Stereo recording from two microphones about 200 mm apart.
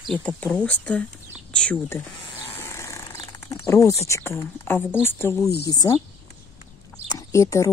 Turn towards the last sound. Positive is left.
turn(degrees=15)  # may be behind; listen again after turning